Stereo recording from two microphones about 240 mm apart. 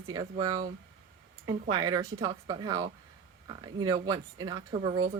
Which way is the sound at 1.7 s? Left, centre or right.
Centre.